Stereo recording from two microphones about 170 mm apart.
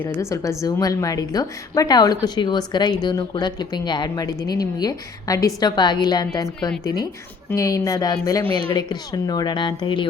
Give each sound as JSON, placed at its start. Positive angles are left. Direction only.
{"t": 0.0, "sound": "a woman's voice", "side_deg": 15}